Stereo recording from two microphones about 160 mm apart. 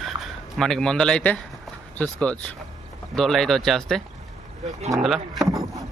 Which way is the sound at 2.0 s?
10° left (ahead or behind).